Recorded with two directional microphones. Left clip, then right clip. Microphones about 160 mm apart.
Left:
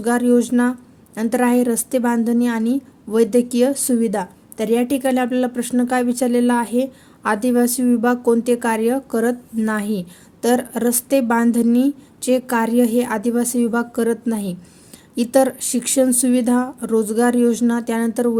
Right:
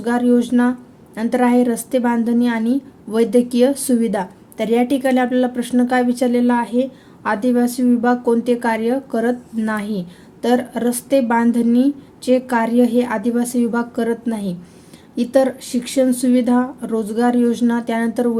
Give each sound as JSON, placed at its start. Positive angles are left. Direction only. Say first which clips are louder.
{"t": 0.0, "sound": "a woman's voice", "louder": "even", "side_deg": 35}